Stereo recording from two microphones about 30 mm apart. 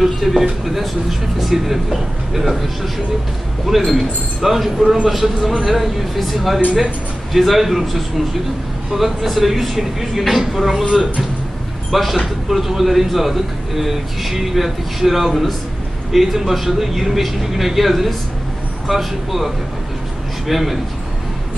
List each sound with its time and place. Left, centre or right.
0.0 s speech: centre
1.4 s a man's voice: centre
10.8 s speech: centre
11.9 s a man's voice: centre